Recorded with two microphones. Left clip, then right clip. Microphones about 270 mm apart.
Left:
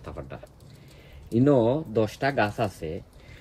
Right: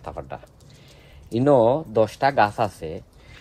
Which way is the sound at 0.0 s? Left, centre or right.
Centre.